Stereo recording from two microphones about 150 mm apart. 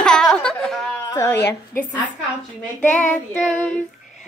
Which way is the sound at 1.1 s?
15° left (ahead or behind).